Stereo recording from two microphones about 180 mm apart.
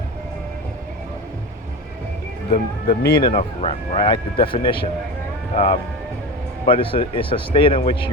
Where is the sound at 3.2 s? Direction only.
30° left (ahead or behind).